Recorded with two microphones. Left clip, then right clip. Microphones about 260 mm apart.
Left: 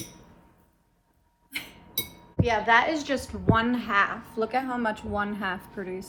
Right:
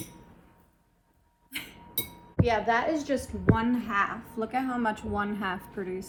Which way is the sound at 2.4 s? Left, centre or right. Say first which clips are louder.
Left 4 dB; left.